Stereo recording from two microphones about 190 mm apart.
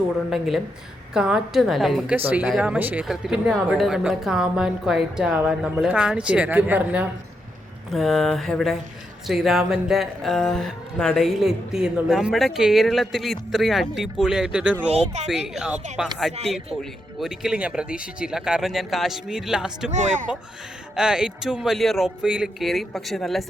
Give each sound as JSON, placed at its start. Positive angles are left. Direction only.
{"t": 0.3, "sound": "speech", "side_deg": 0}
{"t": 14.8, "sound": "speech", "side_deg": -35}
{"t": 15.3, "sound": "speech", "side_deg": 0}
{"t": 19.9, "sound": "speech", "side_deg": -40}
{"t": 20.9, "sound": "speech", "side_deg": -5}